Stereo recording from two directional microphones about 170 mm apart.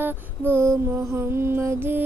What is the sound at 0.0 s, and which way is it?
Child singing, 15° right (ahead or behind).